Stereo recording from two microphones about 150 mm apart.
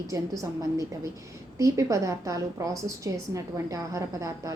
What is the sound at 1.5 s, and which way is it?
A woman's voice, 20° right (ahead or behind).